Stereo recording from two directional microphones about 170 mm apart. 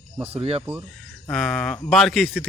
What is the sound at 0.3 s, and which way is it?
Speech, 35° right (ahead or behind).